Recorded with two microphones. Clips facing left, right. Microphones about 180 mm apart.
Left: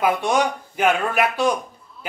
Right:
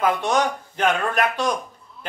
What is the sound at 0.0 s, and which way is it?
A man's voice, 10° left (ahead or behind).